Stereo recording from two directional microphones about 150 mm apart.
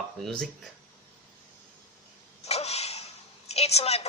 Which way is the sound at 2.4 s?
45° left (ahead or behind).